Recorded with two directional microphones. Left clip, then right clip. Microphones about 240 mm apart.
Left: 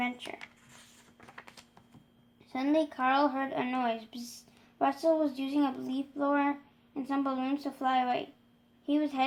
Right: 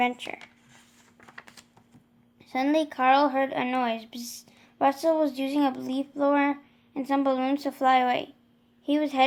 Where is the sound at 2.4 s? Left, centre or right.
Right.